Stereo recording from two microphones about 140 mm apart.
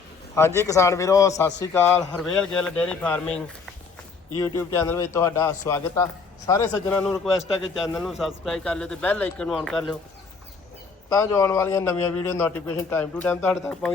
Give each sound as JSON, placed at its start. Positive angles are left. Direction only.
{"t": 0.3, "sound": "a man's voice", "side_deg": 20}
{"t": 4.5, "sound": "a man's voice", "side_deg": 20}
{"t": 11.1, "sound": "a man's voice", "side_deg": 25}
{"t": 13.5, "sound": "speech", "side_deg": 5}